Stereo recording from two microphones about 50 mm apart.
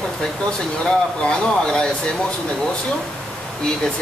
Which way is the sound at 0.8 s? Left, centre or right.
Centre.